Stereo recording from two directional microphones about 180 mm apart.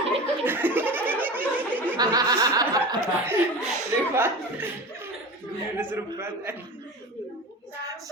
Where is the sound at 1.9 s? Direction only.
20° right (ahead or behind).